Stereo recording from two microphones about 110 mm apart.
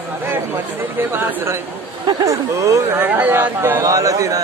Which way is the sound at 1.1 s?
20° right (ahead or behind).